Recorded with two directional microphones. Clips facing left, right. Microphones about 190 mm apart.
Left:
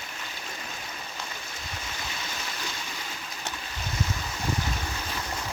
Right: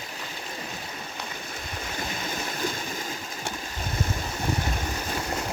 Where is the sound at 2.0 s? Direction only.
50° right (ahead or behind).